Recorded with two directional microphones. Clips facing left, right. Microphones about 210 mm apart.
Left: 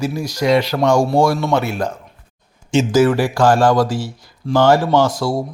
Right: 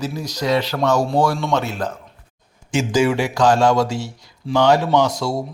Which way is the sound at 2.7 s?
25° left (ahead or behind).